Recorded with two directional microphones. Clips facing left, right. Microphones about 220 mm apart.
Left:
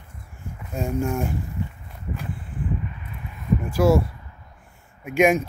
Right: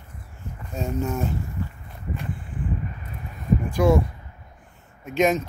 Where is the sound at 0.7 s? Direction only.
10° left (ahead or behind).